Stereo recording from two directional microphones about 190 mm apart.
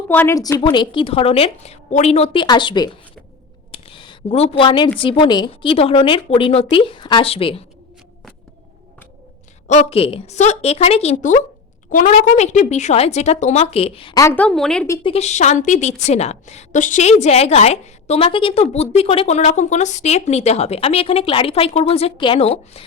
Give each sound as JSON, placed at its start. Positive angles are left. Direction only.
{"t": 0.1, "sound": "a woman's voice", "side_deg": 10}
{"t": 3.7, "sound": "a sound", "side_deg": 30}
{"t": 4.9, "sound": "a woman's voice", "side_deg": 30}
{"t": 9.6, "sound": "a woman's voice", "side_deg": 35}
{"t": 14.2, "sound": "speech", "side_deg": 10}
{"t": 15.0, "sound": "a woman's voice", "side_deg": 35}